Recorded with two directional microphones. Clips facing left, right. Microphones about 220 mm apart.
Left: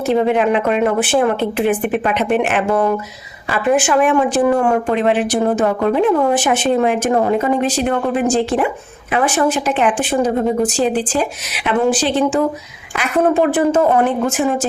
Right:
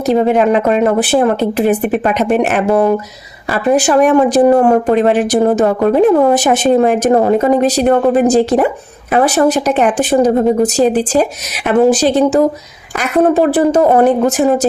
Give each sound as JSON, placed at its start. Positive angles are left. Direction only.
{"t": 0.0, "sound": "speech", "side_deg": -40}